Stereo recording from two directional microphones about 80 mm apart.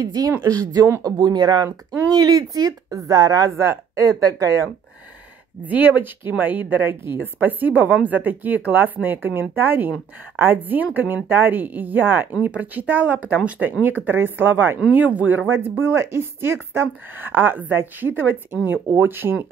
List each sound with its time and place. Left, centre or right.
0.0 s speech: right
5.7 s a woman's voice: right